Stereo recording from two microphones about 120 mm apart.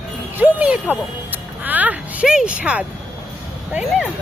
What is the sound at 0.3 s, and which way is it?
Speech, 10° right (ahead or behind).